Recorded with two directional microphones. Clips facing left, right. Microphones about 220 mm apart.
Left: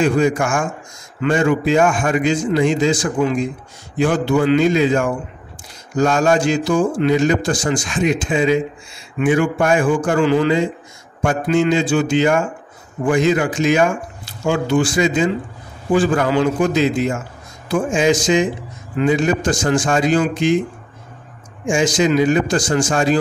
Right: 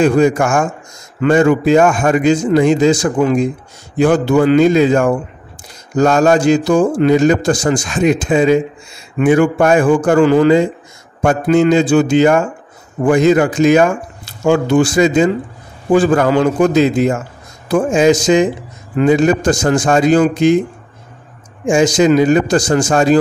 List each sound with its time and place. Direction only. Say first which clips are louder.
0.0 s a man's voice: right 5 dB; 40° right (ahead or behind)
21.6 s a man's voice: right 5 dB; 40° right (ahead or behind)